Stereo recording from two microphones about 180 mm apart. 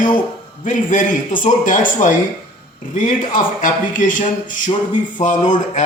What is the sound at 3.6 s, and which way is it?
A man's voice, 45° left (ahead or behind).